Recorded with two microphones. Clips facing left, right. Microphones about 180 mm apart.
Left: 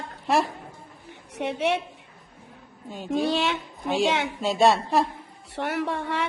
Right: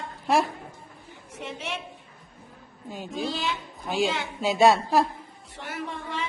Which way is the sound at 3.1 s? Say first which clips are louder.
Left 6 dB; 65° left (ahead or behind).